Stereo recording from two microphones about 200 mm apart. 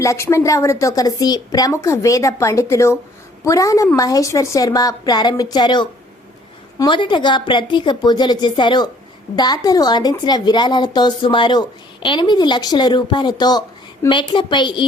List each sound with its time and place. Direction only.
0.0 s a woman's voice: 15° left (ahead or behind)